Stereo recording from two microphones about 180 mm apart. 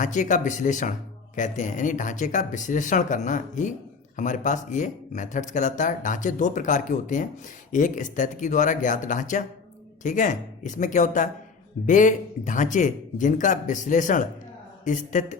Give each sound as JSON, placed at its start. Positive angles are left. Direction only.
{"t": 0.0, "sound": "speech", "side_deg": 45}